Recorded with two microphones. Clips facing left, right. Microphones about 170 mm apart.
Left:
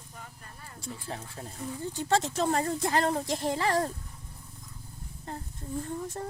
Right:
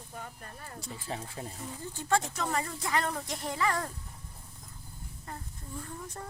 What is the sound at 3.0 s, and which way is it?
Speech, 30° left (ahead or behind).